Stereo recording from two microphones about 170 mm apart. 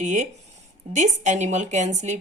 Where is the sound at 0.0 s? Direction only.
45° right (ahead or behind).